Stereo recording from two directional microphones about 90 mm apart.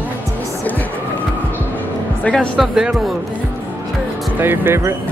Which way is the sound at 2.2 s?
10° left (ahead or behind).